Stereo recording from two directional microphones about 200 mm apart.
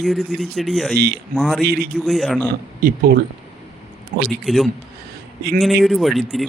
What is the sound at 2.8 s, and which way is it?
Speech, 45° right (ahead or behind).